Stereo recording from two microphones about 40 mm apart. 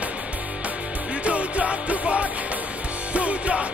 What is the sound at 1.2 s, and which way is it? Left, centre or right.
Music, right.